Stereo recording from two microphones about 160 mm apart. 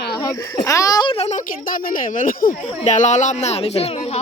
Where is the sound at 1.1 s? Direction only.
40° left (ahead or behind).